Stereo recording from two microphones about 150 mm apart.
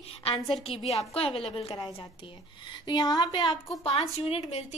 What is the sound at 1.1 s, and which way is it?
Speech, 40° left (ahead or behind).